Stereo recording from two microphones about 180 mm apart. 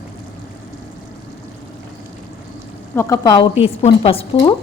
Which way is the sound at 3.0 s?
20° left (ahead or behind).